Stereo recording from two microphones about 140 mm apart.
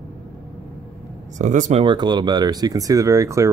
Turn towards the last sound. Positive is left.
turn(degrees=-20)  # may be behind; listen again after turning